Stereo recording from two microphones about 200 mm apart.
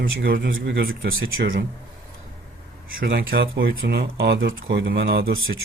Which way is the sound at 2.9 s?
45° right (ahead or behind).